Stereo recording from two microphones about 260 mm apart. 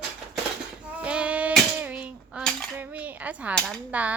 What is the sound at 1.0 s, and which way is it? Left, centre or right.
Cutlery, centre.